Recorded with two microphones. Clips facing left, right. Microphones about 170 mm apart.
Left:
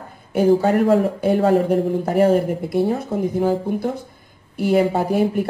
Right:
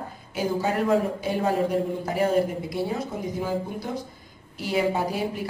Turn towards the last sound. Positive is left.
turn(degrees=55)  # may be behind; listen again after turning